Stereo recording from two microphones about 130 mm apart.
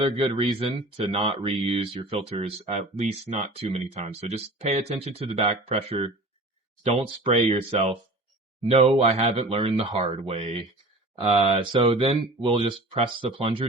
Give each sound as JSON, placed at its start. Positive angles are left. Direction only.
{"t": 0.0, "sound": "speech", "side_deg": -50}